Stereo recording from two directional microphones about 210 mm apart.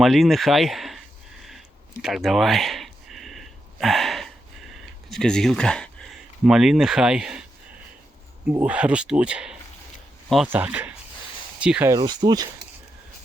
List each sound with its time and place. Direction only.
0.0 s speech: centre (ahead or behind)
1.5 s a sound: centre (ahead or behind)
5.0 s speech: centre (ahead or behind)
8.4 s speech: 5° right (ahead or behind)